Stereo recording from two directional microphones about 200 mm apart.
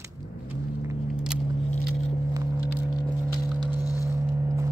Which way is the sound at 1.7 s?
35° left (ahead or behind).